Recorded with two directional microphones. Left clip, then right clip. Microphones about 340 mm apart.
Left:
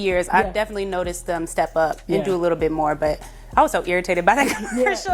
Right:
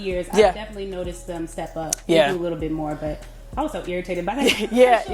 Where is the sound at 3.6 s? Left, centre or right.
Centre.